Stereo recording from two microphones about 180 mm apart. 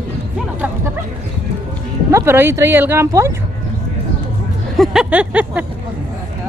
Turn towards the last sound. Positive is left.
turn(degrees=-10)  # may be behind; listen again after turning